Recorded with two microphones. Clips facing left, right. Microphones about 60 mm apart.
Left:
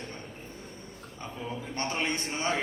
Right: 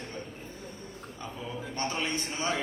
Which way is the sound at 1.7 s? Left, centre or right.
Left.